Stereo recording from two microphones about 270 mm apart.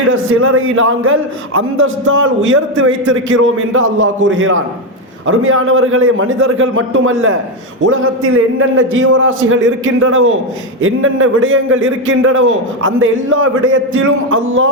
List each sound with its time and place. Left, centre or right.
0.1 s a man's voice: right